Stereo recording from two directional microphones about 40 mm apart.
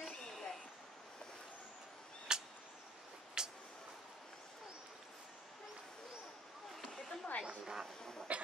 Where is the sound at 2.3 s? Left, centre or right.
Centre.